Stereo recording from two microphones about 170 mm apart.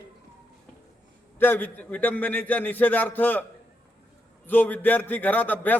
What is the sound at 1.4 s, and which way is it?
A man's voice, 10° left (ahead or behind).